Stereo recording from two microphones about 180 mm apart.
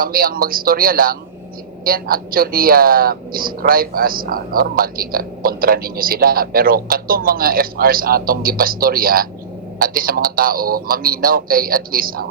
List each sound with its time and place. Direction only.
0.0 s a woman's voice: 55° right (ahead or behind)